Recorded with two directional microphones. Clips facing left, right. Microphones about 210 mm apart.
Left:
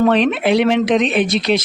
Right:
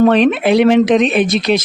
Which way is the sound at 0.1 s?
45° right (ahead or behind).